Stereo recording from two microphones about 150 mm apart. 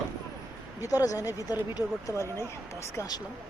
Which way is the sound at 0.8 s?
25° left (ahead or behind).